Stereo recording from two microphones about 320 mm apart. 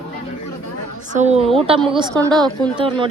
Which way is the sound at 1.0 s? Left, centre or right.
Right.